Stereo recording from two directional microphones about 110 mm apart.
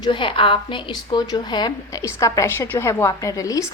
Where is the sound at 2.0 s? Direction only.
30° left (ahead or behind).